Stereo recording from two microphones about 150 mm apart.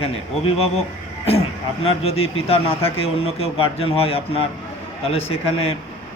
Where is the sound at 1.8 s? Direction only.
40° left (ahead or behind).